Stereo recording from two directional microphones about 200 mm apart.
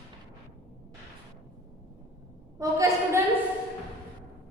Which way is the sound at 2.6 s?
15° right (ahead or behind).